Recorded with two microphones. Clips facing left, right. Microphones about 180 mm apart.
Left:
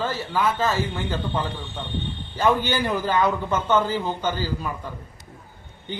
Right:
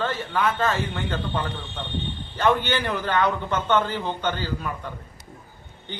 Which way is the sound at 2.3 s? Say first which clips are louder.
Left 1 dB; 10° left (ahead or behind).